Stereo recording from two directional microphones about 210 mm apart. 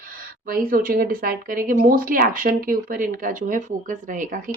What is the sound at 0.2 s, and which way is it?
Speech, 40° right (ahead or behind).